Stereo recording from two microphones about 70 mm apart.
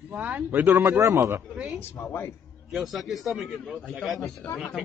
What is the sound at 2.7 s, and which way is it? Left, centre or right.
Speech, centre.